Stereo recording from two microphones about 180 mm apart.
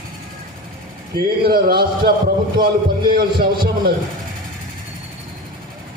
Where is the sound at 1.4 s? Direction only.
55° right (ahead or behind).